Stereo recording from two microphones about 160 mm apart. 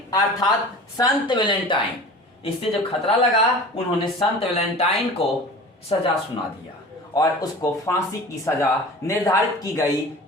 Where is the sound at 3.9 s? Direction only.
35° left (ahead or behind).